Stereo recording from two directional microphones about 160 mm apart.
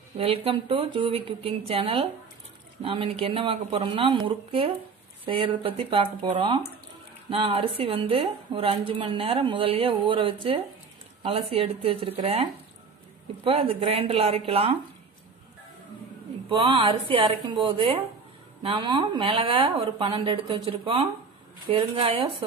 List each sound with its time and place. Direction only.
0.2 s a woman's voice: 35° right (ahead or behind)
16.4 s a woman's voice: 35° right (ahead or behind)